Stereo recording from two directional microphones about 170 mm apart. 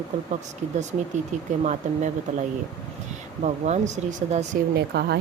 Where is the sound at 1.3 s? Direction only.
45° right (ahead or behind).